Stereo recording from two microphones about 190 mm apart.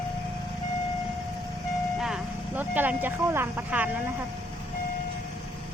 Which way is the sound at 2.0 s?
5° right (ahead or behind).